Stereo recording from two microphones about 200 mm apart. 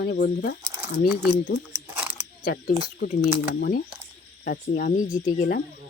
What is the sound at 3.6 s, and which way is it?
Speech, 50° left (ahead or behind).